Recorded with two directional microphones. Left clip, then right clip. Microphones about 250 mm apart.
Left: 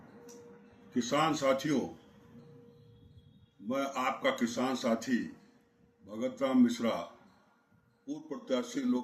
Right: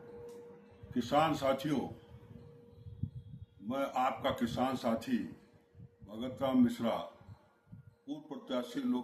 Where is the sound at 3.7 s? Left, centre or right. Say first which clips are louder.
Even; centre.